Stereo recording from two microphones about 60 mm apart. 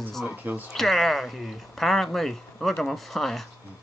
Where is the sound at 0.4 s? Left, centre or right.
Right.